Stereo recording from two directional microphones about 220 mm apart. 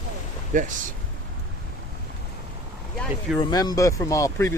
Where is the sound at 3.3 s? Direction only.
15° left (ahead or behind).